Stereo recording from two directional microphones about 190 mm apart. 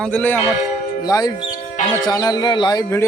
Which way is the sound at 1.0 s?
20° left (ahead or behind).